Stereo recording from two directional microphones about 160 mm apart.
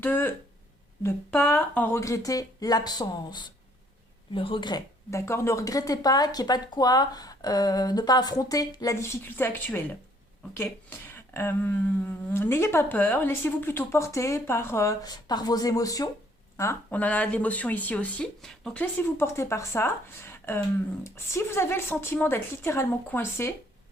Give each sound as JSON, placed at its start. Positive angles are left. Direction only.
{"t": 0.0, "sound": "speech", "side_deg": 15}
{"t": 10.8, "sound": "speech", "side_deg": 15}